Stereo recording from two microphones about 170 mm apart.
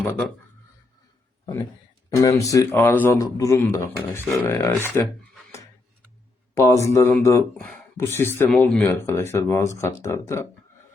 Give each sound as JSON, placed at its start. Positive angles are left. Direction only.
{"t": 2.0, "sound": "a man's voice", "side_deg": 20}
{"t": 6.5, "sound": "a sound", "side_deg": 15}
{"t": 6.8, "sound": "speech", "side_deg": 15}